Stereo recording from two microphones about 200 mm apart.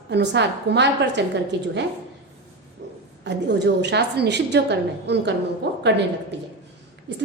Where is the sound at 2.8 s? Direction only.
65° right (ahead or behind).